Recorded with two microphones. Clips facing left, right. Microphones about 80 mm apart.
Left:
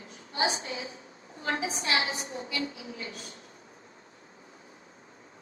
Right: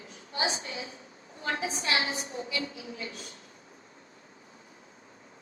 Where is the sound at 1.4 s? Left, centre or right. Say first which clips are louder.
Left 1 dB; left.